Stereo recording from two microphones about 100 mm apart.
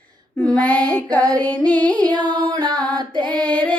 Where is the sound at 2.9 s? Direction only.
45° right (ahead or behind).